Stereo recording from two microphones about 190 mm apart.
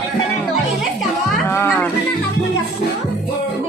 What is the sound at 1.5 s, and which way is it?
Speech, 10° left (ahead or behind).